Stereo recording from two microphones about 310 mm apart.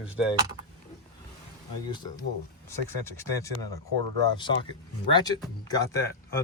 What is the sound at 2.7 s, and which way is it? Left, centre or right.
Speech, centre.